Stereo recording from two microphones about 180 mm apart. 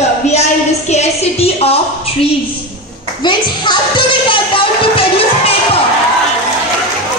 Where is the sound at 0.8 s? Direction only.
35° left (ahead or behind).